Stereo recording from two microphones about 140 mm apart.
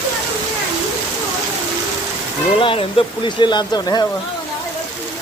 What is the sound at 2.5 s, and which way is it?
Speech, 40° left (ahead or behind).